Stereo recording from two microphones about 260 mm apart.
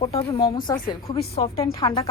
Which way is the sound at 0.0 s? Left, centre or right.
Left.